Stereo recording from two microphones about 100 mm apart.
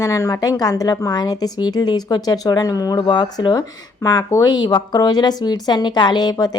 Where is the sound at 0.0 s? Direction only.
30° left (ahead or behind); by 3.5 s 50° left (ahead or behind).